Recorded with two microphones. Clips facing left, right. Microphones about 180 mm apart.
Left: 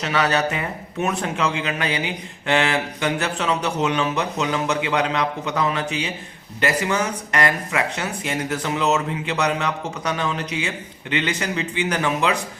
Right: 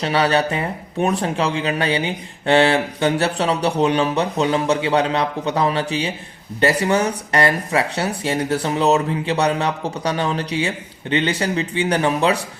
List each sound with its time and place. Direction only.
0.0 s speech: 30° right (ahead or behind)